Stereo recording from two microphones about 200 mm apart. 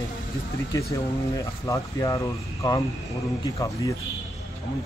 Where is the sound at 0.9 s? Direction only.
15° left (ahead or behind).